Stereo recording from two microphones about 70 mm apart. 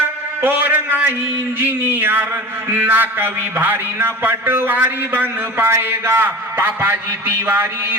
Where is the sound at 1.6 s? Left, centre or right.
Right.